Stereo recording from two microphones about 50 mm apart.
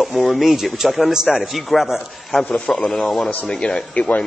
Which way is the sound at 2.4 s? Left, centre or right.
Centre.